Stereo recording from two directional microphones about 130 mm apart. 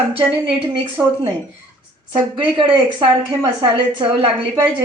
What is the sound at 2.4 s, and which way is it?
Speech, 40° right (ahead or behind).